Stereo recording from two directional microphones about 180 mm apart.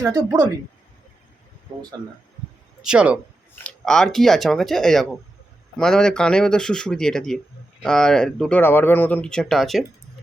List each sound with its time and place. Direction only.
0.0 s speech: 20° right (ahead or behind)
2.8 s speech: 5° right (ahead or behind)
3.5 s speech: 5° left (ahead or behind)